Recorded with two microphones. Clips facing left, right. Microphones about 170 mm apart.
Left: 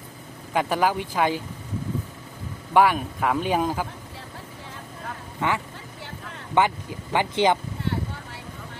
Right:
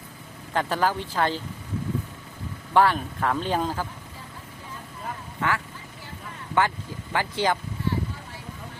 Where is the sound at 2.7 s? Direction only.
10° left (ahead or behind).